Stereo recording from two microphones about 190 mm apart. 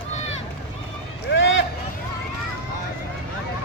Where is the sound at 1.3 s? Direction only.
75° left (ahead or behind).